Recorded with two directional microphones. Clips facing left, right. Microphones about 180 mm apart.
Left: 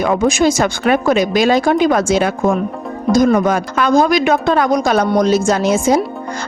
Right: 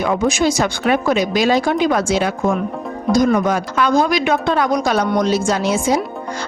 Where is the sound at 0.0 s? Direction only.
45° left (ahead or behind).